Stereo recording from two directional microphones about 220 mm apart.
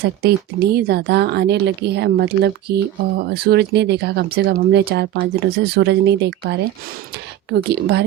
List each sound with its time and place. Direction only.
0.2 s speech: 45° right (ahead or behind)